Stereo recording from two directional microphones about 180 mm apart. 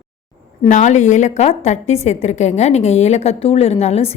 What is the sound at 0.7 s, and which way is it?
A woman's voice, 40° left (ahead or behind).